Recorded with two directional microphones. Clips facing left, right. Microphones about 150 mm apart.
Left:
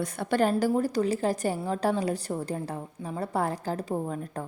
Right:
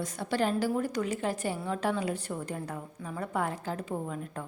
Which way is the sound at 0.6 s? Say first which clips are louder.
Left 4 dB; 35° left (ahead or behind).